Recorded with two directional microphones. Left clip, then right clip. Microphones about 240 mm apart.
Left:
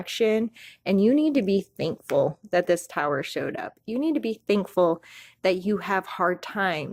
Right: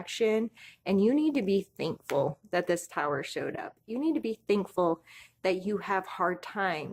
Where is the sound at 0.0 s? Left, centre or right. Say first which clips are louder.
Left 5 dB; left.